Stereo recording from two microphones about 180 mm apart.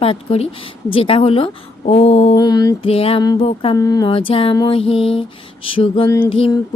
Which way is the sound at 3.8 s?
20° left (ahead or behind).